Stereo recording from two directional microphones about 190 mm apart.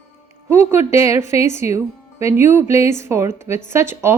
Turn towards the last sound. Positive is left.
turn(degrees=-15)  # may be behind; listen again after turning